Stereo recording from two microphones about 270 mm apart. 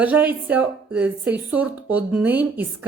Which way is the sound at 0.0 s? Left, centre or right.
Centre.